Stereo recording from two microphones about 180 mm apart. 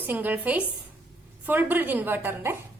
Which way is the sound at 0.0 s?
10° right (ahead or behind).